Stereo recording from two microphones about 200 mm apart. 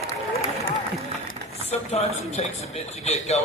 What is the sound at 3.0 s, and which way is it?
Speech, 35° left (ahead or behind).